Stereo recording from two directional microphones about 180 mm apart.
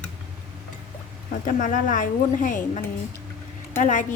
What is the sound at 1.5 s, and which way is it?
A woman's voice, 45° left (ahead or behind).